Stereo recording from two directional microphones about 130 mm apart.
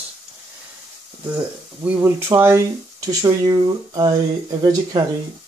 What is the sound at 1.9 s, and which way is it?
Speech, 15° right (ahead or behind).